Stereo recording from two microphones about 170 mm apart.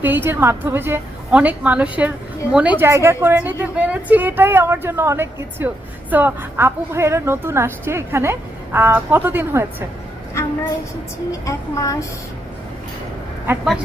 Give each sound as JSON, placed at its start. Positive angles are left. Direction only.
{"t": 0.0, "sound": "a woman's voice", "side_deg": -10}
{"t": 11.3, "sound": "a woman's voice", "side_deg": 20}